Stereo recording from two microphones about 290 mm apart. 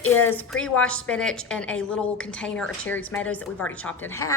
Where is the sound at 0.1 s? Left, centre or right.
Centre.